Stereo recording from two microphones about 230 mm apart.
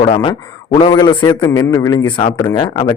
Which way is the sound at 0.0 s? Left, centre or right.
Left.